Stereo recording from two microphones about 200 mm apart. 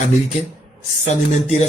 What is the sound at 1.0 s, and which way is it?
Speech, 35° left (ahead or behind).